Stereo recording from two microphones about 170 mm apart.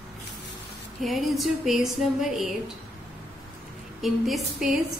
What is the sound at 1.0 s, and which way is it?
A woman's voice, centre (ahead or behind).